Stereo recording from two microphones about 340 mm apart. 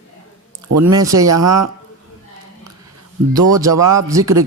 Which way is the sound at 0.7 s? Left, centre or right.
Right.